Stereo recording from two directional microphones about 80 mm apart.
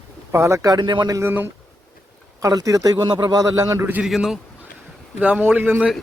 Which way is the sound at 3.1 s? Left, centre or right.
Right.